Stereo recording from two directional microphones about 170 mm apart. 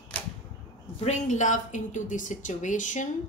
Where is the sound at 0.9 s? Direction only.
45° left (ahead or behind).